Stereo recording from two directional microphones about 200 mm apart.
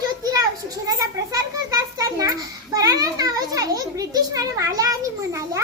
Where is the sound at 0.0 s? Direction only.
20° right (ahead or behind).